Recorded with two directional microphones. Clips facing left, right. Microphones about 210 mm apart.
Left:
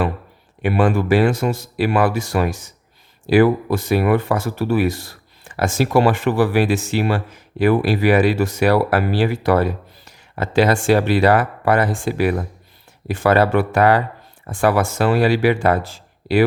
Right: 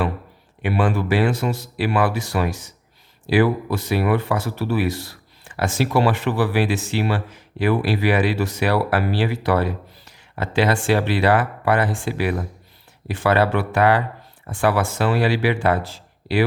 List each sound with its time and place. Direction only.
0.6 s speech: 45° left (ahead or behind)